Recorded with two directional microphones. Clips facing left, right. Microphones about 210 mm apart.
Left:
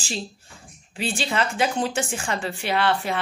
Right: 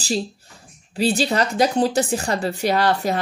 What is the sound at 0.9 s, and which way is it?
A woman's voice, 40° right (ahead or behind).